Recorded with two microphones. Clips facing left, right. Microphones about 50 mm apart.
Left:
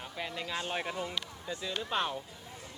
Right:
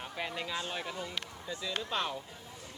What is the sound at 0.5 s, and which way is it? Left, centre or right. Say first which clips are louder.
Speech: left 2 dB; left.